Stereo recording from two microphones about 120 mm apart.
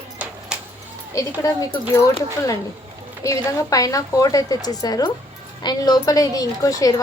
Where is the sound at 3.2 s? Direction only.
30° left (ahead or behind).